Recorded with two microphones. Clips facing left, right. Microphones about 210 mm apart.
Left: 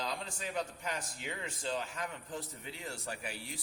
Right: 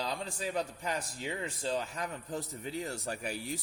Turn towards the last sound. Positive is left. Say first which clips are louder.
# right 6 dB
turn(degrees=-40)  # may be behind; listen again after turning